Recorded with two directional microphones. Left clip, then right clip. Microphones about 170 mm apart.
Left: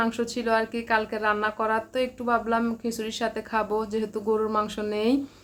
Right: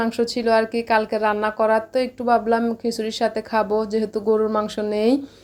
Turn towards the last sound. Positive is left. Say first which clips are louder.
# right 5 dB
turn(degrees=-25)  # may be behind; listen again after turning